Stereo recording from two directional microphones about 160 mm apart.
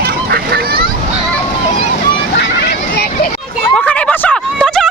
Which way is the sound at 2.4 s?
90° left.